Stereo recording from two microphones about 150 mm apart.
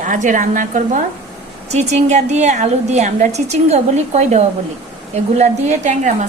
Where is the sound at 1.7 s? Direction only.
50° right (ahead or behind).